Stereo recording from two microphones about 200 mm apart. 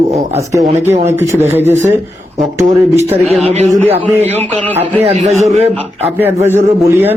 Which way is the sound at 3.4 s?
35° right (ahead or behind).